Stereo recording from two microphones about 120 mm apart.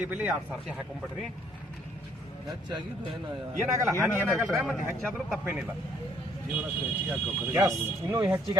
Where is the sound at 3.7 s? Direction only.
25° right (ahead or behind).